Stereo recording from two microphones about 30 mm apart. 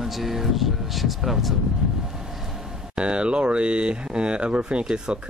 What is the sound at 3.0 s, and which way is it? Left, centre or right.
Speech, right.